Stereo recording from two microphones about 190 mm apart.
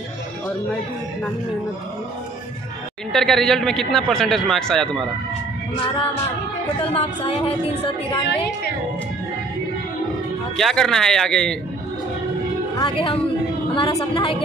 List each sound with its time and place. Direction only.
3.1 s a man's voice: centre (ahead or behind)
6.8 s speech: 30° left (ahead or behind)
10.6 s a man's voice: centre (ahead or behind)
12.7 s speech: 30° left (ahead or behind)